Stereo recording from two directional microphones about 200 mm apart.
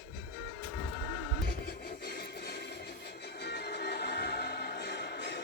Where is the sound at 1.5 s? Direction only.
50° left (ahead or behind).